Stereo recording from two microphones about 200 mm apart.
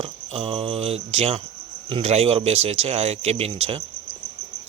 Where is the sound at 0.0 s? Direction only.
30° right (ahead or behind).